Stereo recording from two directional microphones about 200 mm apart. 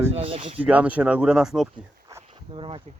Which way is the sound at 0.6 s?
5° right (ahead or behind).